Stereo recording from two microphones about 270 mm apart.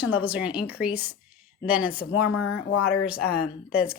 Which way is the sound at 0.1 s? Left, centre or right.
Centre.